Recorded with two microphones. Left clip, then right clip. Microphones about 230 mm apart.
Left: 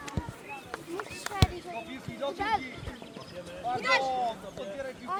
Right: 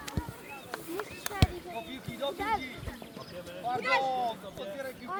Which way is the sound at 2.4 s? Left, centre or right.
Left.